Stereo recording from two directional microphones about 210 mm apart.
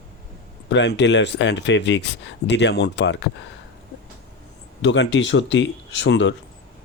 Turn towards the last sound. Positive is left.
turn(degrees=60)  # may be behind; listen again after turning